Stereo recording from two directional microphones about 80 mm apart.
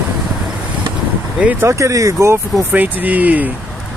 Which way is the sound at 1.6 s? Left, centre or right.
Right.